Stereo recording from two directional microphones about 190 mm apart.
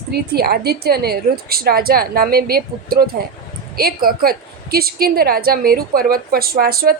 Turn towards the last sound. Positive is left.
turn(degrees=-55)  # may be behind; listen again after turning